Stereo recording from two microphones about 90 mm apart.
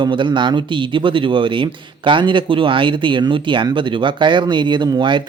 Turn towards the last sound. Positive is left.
turn(degrees=-60)  # may be behind; listen again after turning